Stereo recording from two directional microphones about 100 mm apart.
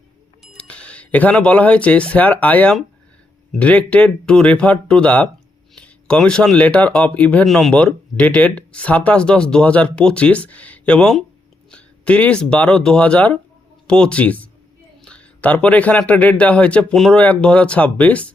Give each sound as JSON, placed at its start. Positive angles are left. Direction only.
{"t": 0.7, "sound": "speech", "side_deg": 10}